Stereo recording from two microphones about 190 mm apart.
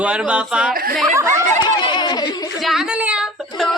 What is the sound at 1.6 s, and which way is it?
Speech, 25° left (ahead or behind).